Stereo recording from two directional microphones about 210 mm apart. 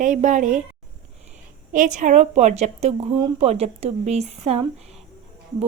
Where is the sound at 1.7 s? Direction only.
35° right (ahead or behind).